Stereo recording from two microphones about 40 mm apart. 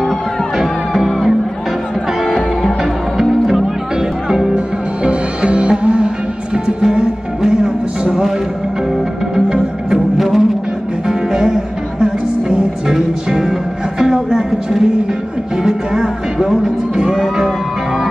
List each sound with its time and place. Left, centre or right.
0.6 s music: centre
2.8 s music: centre
5.0 s music: right
9.3 s music: centre
9.9 s music: centre